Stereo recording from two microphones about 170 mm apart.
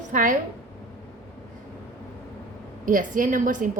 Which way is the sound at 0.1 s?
50° right (ahead or behind).